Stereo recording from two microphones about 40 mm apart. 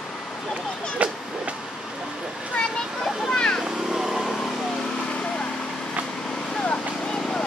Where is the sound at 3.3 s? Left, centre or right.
Left.